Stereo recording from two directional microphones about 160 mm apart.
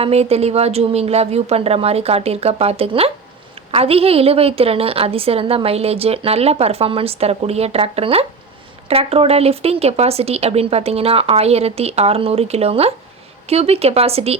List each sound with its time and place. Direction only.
0.0 s a woman's voice: 40° right (ahead or behind)